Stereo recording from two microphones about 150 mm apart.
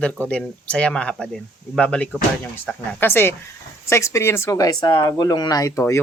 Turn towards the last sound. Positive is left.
turn(degrees=20)  # may be behind; listen again after turning